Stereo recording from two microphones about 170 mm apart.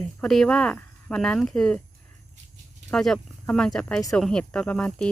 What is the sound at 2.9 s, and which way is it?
Speech, 5° left (ahead or behind).